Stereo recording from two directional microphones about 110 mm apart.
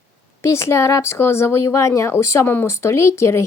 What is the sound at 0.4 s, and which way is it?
Speech, 25° left (ahead or behind).